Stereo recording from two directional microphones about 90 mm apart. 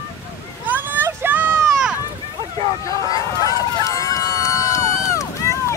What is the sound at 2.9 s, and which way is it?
Run, 40° left (ahead or behind).